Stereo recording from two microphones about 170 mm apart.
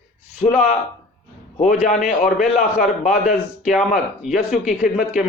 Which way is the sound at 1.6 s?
50° left (ahead or behind).